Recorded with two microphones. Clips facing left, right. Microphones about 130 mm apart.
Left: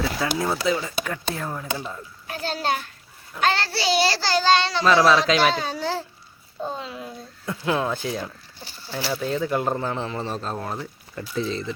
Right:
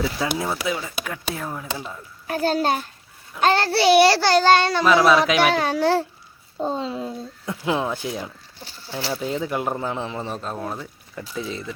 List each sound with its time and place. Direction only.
0.0 s speech: 10° right (ahead or behind)
2.2 s a child's voice: 45° right (ahead or behind)
3.4 s child singing: 45° right (ahead or behind)
4.8 s speech: 10° right (ahead or behind)
5.5 s child singing: 65° right (ahead or behind)
6.6 s a child's voice: 30° right (ahead or behind)
7.4 s speech: 15° right (ahead or behind)